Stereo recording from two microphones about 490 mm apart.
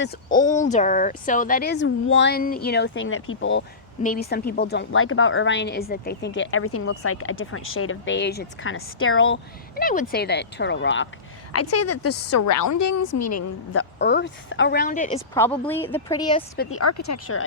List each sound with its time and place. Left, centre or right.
0.0 s a woman's voice: centre; by 13.8 s left
14.0 s a woman's voice: left
16.6 s a woman's voice: left